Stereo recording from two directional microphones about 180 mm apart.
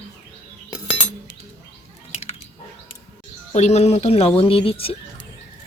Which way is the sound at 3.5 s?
40° left (ahead or behind).